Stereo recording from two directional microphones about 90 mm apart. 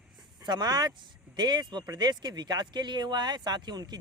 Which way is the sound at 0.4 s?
50° right (ahead or behind).